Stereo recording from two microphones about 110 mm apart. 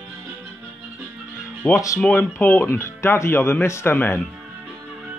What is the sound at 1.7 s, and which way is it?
Speech, 30° left (ahead or behind).